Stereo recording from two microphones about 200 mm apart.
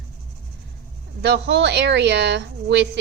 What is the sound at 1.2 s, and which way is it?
A woman's voice, 60° right (ahead or behind).